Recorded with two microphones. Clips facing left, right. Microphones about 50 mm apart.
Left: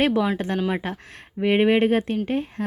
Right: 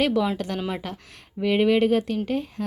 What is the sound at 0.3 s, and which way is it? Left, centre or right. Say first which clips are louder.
Speech: left 4 dB; left.